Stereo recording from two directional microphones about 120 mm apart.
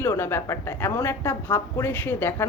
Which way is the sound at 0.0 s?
20° left (ahead or behind).